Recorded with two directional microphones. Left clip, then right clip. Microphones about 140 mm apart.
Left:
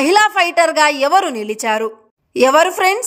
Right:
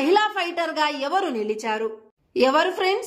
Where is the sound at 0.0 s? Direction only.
35° left (ahead or behind).